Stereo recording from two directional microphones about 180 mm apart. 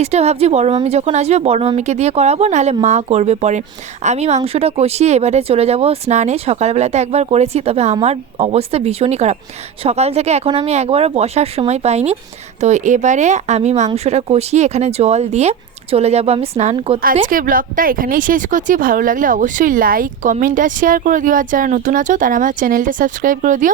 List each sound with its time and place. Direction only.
0.0 s speech: 35° right (ahead or behind)
17.0 s speech: 50° right (ahead or behind)